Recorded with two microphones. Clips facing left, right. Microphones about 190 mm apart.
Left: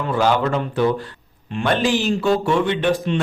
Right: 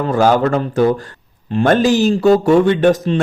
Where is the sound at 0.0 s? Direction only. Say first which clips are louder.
Right 5 dB; 45° right (ahead or behind).